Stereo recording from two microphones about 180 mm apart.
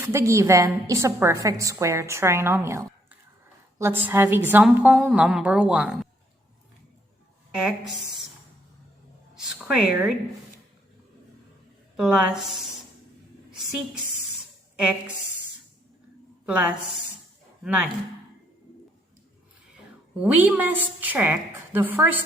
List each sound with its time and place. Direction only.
0.0 s a woman's voice: 15° right (ahead or behind)
7.6 s a woman's voice: centre (ahead or behind)
9.3 s a sound: 5° right (ahead or behind)
11.9 s a woman's voice: 5° right (ahead or behind)
16.5 s a woman's voice: 10° right (ahead or behind)
20.1 s a woman's voice: 10° right (ahead or behind)